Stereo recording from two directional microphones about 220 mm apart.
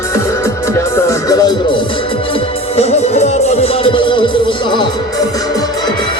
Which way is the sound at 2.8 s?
30° left (ahead or behind).